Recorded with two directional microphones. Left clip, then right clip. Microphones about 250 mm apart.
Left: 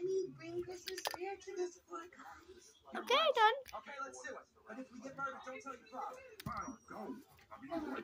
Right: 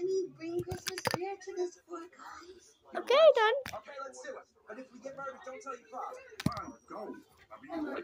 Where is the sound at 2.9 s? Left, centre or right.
Centre.